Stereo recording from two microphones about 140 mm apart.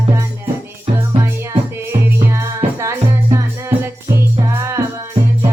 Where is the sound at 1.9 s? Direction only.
20° right (ahead or behind).